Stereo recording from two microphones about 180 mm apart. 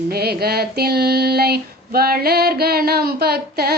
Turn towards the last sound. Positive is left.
turn(degrees=-60)  # may be behind; listen again after turning